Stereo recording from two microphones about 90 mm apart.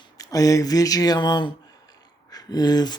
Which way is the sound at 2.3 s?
50° left (ahead or behind).